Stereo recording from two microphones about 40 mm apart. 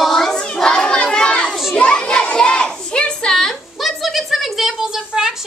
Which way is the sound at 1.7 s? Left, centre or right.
Left.